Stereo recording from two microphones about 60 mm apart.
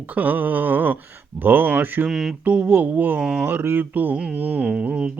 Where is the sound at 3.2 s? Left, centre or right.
Centre.